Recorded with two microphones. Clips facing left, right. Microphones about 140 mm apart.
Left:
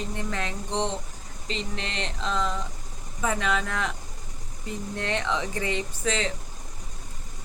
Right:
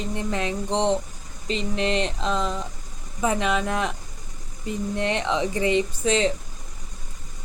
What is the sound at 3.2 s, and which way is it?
A woman's voice, 20° right (ahead or behind).